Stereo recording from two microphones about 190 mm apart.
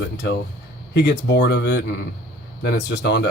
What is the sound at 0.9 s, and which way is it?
Speech, 65° left (ahead or behind).